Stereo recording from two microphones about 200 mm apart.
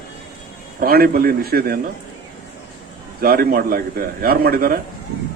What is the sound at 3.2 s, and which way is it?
A man's voice, 45° right (ahead or behind).